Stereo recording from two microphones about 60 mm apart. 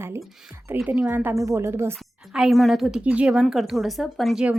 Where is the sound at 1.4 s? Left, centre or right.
Right.